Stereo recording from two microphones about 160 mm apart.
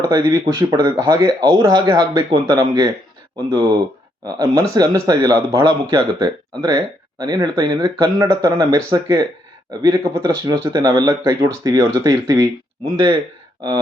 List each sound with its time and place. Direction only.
0.1 s speech: 20° right (ahead or behind)
10.0 s speech: 35° right (ahead or behind)
10.4 s speech: 20° right (ahead or behind)